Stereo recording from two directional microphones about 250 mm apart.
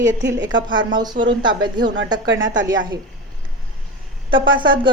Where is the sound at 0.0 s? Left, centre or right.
Right.